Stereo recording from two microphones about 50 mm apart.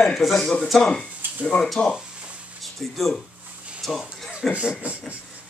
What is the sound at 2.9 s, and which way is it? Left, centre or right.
Speech, centre.